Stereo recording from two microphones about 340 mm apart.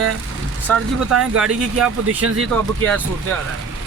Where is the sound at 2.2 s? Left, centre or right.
Right.